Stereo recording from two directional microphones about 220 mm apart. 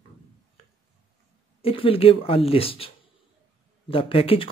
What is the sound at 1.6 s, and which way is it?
Speech, 25° left (ahead or behind).